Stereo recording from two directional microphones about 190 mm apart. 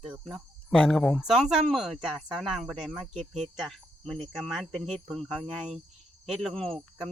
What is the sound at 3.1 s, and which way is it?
Cricket, 35° right (ahead or behind).